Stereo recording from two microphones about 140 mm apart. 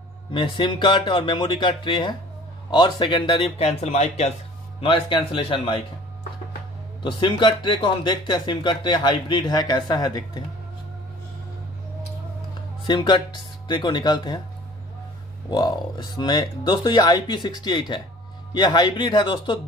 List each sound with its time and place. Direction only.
0.3 s speech: 35° left (ahead or behind); by 4.3 s 55° left (ahead or behind)
4.7 s speech: 40° left (ahead or behind)
7.0 s speech: 35° left (ahead or behind)
12.8 s speech: 35° left (ahead or behind)
15.5 s speech: 30° left (ahead or behind)